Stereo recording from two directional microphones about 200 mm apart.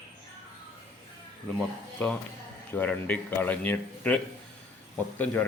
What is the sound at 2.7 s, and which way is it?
Speech, 10° left (ahead or behind).